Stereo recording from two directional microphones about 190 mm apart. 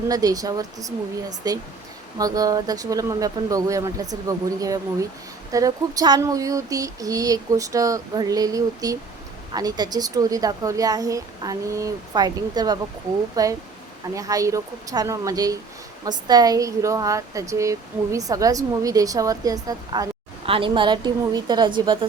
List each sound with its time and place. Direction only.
0.1 s speech: 20° right (ahead or behind)